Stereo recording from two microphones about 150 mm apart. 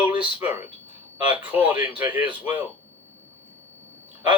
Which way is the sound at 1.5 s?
10° right (ahead or behind).